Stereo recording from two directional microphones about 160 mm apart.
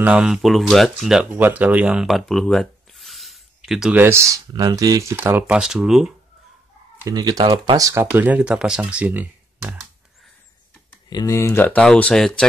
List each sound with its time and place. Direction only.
0.0 s speech: 5° right (ahead or behind)
4.0 s speech: 15° right (ahead or behind)
5.6 s speech: 5° right (ahead or behind)
7.0 s speech: 20° right (ahead or behind)
11.1 s speech: 20° left (ahead or behind); by 12.4 s 5° left (ahead or behind)